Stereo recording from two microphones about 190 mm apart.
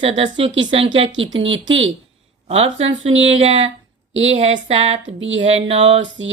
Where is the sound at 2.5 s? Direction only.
35° right (ahead or behind).